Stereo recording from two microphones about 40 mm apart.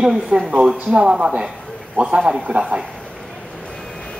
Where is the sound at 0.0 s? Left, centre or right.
Centre.